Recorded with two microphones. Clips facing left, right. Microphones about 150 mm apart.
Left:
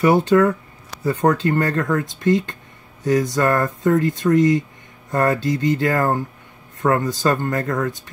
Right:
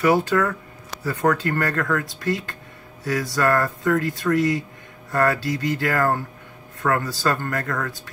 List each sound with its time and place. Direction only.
0.0 s speech: 25° left (ahead or behind)